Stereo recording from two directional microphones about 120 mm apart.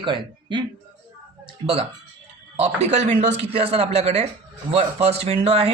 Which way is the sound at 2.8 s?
65° right (ahead or behind).